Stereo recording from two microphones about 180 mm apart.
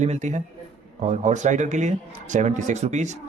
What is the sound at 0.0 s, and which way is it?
Speech, 40° right (ahead or behind).